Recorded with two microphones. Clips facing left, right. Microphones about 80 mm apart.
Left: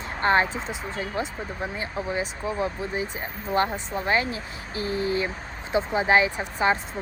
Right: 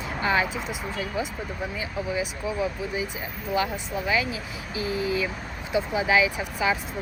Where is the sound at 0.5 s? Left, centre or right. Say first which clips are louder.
Even; left.